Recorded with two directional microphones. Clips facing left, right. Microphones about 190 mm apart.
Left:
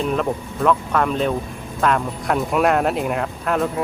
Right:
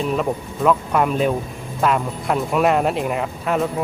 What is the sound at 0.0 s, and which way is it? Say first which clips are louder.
Speech: even; centre (ahead or behind).